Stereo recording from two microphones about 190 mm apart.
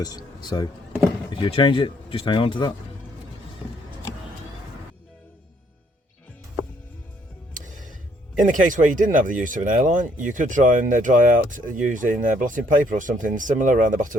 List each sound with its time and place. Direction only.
0.0 s speech: 20° left (ahead or behind)
7.5 s music: 45° right (ahead or behind)
8.4 s speech: 45° right (ahead or behind)